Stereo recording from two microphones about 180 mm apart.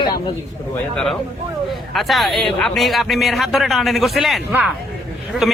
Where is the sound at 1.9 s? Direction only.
Centre (ahead or behind).